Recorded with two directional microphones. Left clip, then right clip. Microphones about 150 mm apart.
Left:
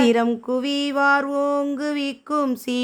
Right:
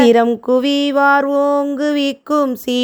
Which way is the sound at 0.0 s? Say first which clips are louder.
Right 8 dB; 45° right (ahead or behind).